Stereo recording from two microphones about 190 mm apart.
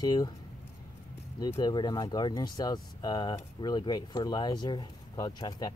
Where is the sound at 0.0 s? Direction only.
20° left (ahead or behind).